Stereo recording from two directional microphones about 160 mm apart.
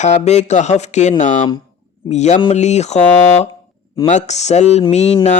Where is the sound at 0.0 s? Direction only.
45° left (ahead or behind).